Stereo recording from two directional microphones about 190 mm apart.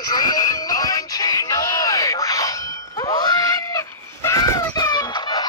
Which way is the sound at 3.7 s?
15° left (ahead or behind).